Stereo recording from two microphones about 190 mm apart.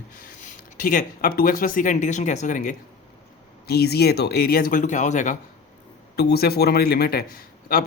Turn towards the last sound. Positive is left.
turn(degrees=50)  # may be behind; listen again after turning